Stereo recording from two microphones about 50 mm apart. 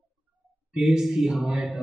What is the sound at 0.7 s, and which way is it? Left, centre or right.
A man's voice, centre.